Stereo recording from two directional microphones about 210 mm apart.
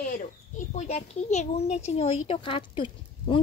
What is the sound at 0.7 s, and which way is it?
Speech, 30° left (ahead or behind).